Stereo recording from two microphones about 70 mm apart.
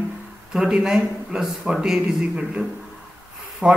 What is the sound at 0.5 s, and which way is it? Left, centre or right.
A man's voice, centre.